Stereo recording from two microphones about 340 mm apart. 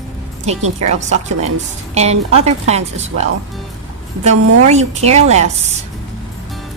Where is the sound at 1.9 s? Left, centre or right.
Centre.